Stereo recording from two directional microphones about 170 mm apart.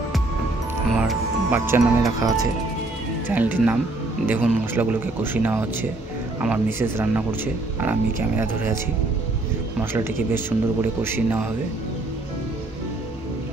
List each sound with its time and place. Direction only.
1.5 s speech: 15° right (ahead or behind)
3.3 s speech: 10° right (ahead or behind)
9.8 s speech: 10° right (ahead or behind)